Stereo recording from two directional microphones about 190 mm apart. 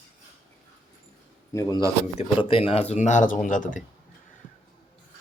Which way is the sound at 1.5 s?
15° left (ahead or behind).